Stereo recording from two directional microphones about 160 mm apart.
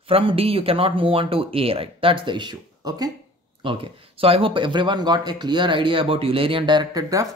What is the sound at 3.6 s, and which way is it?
Speech, 35° right (ahead or behind).